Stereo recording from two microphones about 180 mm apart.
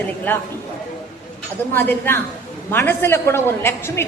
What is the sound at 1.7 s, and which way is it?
A woman's voice, 10° left (ahead or behind).